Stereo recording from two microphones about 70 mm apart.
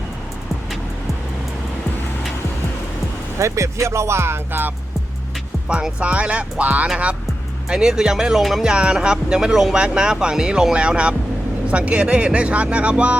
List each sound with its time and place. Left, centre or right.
3.3 s speech: right
5.6 s speech: centre
8.7 s speech: centre